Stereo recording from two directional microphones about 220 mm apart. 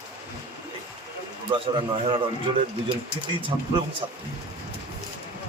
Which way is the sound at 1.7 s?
20° right (ahead or behind).